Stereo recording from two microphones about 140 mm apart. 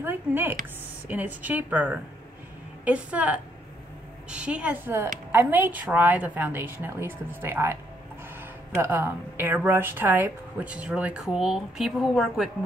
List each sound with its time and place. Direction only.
0.0 s a woman's voice: 15° right (ahead or behind)